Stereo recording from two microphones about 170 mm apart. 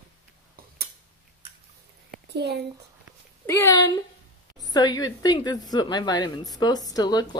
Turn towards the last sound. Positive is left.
turn(degrees=25)  # may be behind; listen again after turning